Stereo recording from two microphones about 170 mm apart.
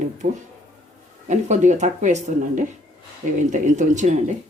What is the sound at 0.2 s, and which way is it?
Speech, 40° right (ahead or behind).